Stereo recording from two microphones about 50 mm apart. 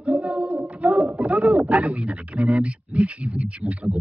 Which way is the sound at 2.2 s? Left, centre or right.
Right.